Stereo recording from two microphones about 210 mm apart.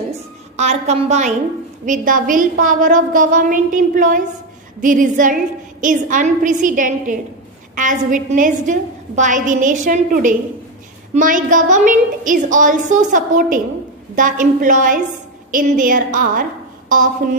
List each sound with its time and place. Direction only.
0.6 s a woman's voice: 30° right (ahead or behind)